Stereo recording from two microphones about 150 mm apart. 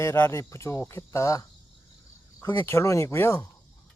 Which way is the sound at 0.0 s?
15° left (ahead or behind).